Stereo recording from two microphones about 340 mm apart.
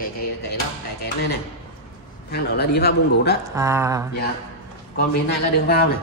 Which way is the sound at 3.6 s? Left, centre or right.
Centre.